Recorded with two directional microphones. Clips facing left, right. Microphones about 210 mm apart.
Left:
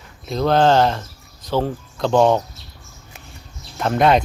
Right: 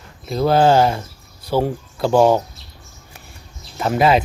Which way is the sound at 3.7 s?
5° right (ahead or behind).